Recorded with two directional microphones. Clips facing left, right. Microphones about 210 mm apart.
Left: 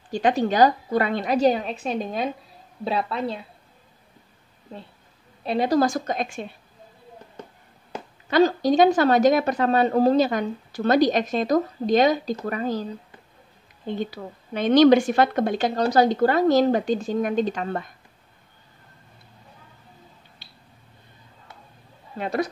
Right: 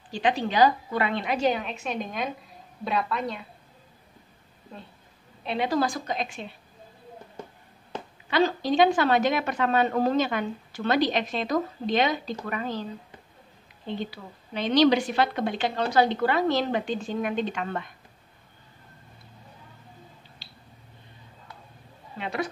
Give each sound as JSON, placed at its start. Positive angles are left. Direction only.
{"t": 0.1, "sound": "a woman's voice", "side_deg": 45}
{"t": 5.4, "sound": "a woman's voice", "side_deg": 40}
{"t": 8.3, "sound": "a woman's voice", "side_deg": 40}
{"t": 13.8, "sound": "a woman's voice", "side_deg": 50}
{"t": 22.1, "sound": "a woman's voice", "side_deg": 40}